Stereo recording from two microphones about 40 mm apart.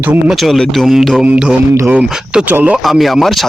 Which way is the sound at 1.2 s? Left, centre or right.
Right.